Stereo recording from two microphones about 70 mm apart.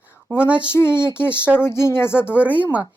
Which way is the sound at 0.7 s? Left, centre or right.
Left.